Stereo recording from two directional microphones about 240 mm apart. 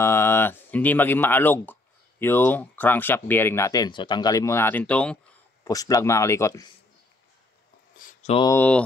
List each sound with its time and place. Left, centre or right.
0.0 s speech: centre
8.0 s a sound: left
8.5 s speech: centre